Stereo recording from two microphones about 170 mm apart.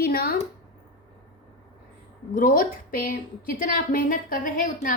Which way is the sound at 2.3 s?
55° left (ahead or behind).